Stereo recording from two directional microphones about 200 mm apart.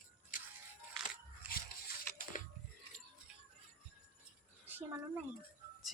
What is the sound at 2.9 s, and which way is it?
Music, 5° left (ahead or behind).